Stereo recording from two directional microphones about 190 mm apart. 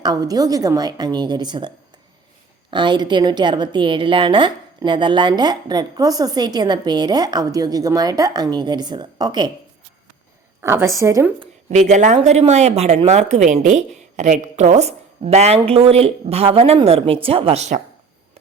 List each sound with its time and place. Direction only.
0.0 s a woman's voice: 20° right (ahead or behind)
10.6 s a woman's voice: 15° right (ahead or behind)
11.7 s speech: 40° right (ahead or behind)